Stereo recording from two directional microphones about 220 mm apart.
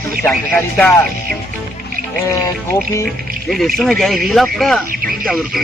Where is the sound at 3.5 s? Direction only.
Centre (ahead or behind).